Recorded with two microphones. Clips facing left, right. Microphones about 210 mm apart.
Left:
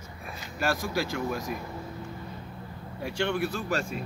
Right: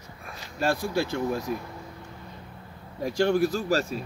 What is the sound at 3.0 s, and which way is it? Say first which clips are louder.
Speech: right 6 dB; 35° right (ahead or behind).